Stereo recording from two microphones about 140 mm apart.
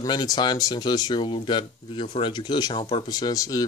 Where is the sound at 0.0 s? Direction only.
30° left (ahead or behind).